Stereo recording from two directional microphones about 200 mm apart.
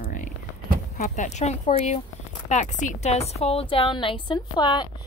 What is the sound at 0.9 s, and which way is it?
A woman's voice, 35° left (ahead or behind).